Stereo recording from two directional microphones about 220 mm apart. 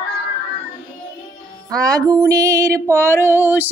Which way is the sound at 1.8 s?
15° right (ahead or behind).